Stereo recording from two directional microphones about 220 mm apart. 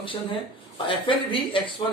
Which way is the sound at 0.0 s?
25° left (ahead or behind).